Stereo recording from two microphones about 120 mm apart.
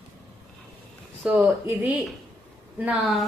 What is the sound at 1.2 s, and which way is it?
Speech, 10° right (ahead or behind).